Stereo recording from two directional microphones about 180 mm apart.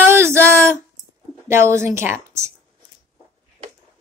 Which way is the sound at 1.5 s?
15° right (ahead or behind).